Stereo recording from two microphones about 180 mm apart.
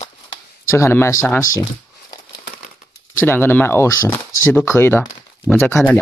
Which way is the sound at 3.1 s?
10° left (ahead or behind).